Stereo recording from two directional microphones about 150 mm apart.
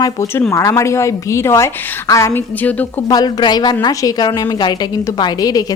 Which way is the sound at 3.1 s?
25° left (ahead or behind).